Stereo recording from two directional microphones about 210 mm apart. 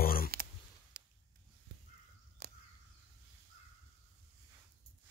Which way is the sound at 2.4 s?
50° right (ahead or behind).